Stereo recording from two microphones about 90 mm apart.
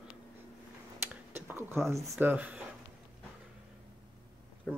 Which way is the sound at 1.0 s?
25° right (ahead or behind).